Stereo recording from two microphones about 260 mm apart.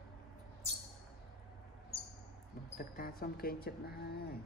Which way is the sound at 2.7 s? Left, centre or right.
Left.